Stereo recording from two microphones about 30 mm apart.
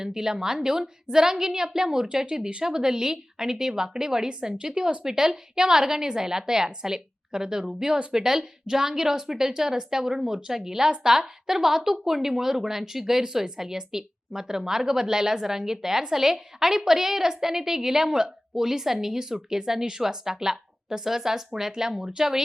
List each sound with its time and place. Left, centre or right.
0.0 s a woman's voice: centre